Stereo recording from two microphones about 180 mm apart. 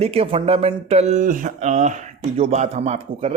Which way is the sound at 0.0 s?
35° right (ahead or behind).